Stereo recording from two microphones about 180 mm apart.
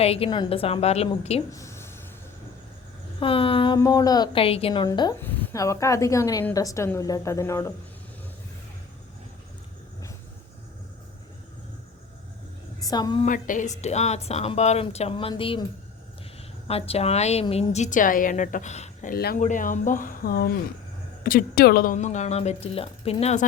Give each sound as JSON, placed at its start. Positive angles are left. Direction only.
{"t": 0.0, "sound": "speech", "side_deg": 35}
{"t": 1.5, "sound": "a sound", "side_deg": 15}
{"t": 3.2, "sound": "a woman's voice", "side_deg": 30}
{"t": 5.2, "sound": "a woman's voice", "side_deg": 10}
{"t": 12.8, "sound": "a woman's voice", "side_deg": 25}
{"t": 13.2, "sound": "speech", "side_deg": 45}
{"t": 16.6, "sound": "a woman's voice", "side_deg": 35}
{"t": 19.1, "sound": "a woman's voice", "side_deg": 55}
{"t": 21.9, "sound": "speech", "side_deg": 40}